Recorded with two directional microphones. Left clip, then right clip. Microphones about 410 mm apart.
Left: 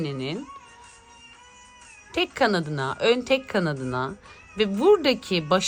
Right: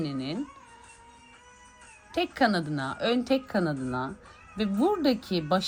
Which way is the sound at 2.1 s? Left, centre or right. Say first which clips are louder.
Left 3 dB; centre.